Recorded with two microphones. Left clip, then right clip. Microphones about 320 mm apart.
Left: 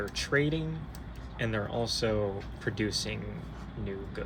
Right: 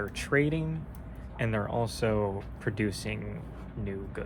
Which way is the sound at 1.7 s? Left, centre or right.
Right.